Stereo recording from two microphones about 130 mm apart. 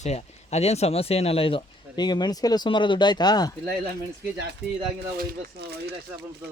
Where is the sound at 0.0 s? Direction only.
55° left (ahead or behind); by 3.5 s 30° left (ahead or behind).